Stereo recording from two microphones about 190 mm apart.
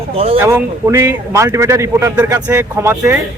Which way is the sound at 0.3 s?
15° right (ahead or behind).